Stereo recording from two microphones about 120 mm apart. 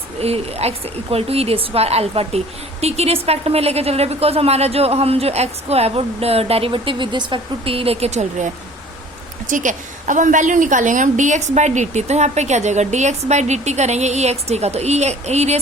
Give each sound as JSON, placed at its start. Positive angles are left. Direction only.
{"t": 0.2, "sound": "a woman's voice", "side_deg": -60}
{"t": 9.5, "sound": "a woman's voice", "side_deg": -90}